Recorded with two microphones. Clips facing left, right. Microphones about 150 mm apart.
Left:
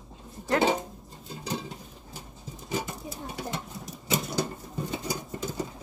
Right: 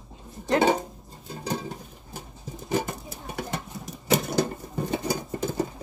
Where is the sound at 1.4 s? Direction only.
50° right (ahead or behind).